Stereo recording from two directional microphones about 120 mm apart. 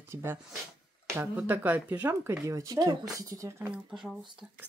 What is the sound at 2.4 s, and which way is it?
Speech, 30° right (ahead or behind).